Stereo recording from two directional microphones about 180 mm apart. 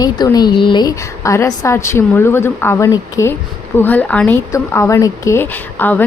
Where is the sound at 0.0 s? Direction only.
20° left (ahead or behind).